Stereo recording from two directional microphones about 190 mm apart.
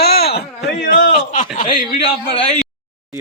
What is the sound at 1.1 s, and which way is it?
Speech, 45° left (ahead or behind).